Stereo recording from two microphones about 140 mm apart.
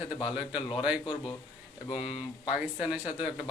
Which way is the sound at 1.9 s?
40° left (ahead or behind).